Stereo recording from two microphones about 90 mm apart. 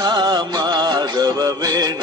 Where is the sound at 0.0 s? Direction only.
55° right (ahead or behind).